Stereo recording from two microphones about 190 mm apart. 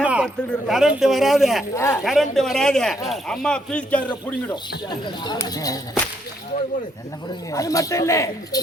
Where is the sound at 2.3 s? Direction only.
Centre (ahead or behind).